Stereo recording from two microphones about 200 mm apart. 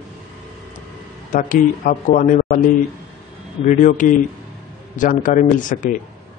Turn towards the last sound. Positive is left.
turn(degrees=40)  # may be behind; listen again after turning